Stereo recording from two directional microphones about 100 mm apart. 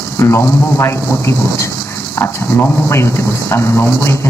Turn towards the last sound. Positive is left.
turn(degrees=25)  # may be behind; listen again after turning